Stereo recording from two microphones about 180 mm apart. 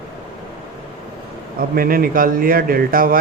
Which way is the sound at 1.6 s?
55° right (ahead or behind).